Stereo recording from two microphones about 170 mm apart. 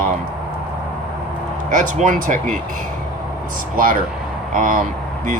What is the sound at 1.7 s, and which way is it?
Speech, 50° right (ahead or behind).